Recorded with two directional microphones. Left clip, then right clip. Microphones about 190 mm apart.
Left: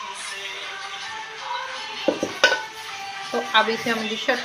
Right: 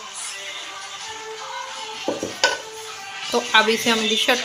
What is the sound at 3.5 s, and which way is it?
Speech, 15° right (ahead or behind).